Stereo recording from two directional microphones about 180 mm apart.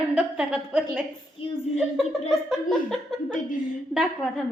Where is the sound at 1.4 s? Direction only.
30° left (ahead or behind).